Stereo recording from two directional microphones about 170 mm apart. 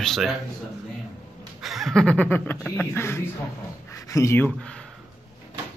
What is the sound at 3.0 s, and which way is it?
Speech, 15° left (ahead or behind).